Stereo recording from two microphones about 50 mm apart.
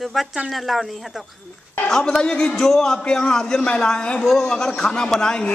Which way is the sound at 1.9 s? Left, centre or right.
Centre.